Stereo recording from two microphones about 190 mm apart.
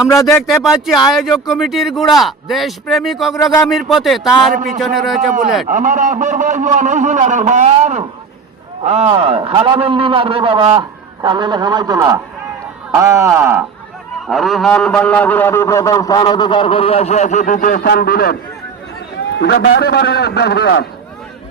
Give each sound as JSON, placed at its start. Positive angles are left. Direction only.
{"t": 0.1, "sound": "speech", "side_deg": 15}
{"t": 0.4, "sound": "speech", "side_deg": 0}
{"t": 3.3, "sound": "a man's voice", "side_deg": 20}
{"t": 3.7, "sound": "speech", "side_deg": 0}
{"t": 5.6, "sound": "a man's voice", "side_deg": -45}
{"t": 14.3, "sound": "a man's voice", "side_deg": 0}
{"t": 19.4, "sound": "a man's voice", "side_deg": 60}
{"t": 19.8, "sound": "a man's voice", "side_deg": 60}